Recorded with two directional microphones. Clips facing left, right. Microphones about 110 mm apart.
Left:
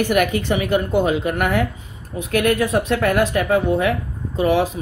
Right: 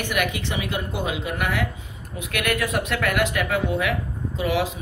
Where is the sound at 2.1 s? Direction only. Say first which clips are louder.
Left 7 dB; 35° left (ahead or behind).